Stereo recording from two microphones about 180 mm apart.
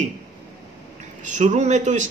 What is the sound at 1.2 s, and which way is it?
Speech, 45° right (ahead or behind).